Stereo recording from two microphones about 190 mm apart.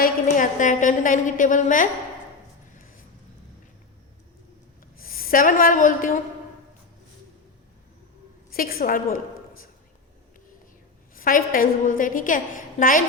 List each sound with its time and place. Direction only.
0.0 s a woman's voice: 45° left (ahead or behind)
4.9 s a woman's voice: 50° left (ahead or behind)
8.4 s a woman's voice: 50° left (ahead or behind)
11.1 s a woman's voice: 45° left (ahead or behind)